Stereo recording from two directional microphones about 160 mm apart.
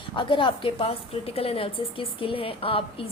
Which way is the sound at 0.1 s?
30° left (ahead or behind).